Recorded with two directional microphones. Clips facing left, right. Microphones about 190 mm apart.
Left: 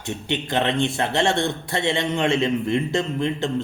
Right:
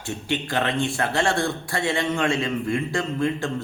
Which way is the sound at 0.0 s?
20° left (ahead or behind).